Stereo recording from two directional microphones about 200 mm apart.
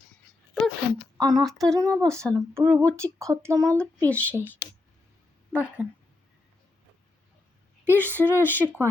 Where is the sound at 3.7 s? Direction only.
5° left (ahead or behind).